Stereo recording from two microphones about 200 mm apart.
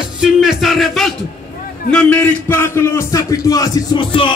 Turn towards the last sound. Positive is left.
turn(degrees=25)  # may be behind; listen again after turning